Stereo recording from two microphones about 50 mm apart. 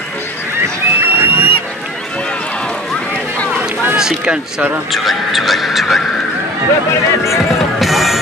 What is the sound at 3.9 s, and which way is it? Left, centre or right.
Speech, centre.